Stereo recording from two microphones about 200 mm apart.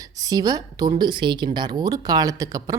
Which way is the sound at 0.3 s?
20° right (ahead or behind).